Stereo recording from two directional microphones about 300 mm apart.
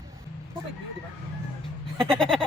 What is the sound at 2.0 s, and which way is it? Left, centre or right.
Speech, centre.